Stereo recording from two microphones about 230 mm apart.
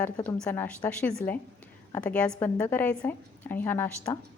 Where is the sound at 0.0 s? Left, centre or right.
Centre.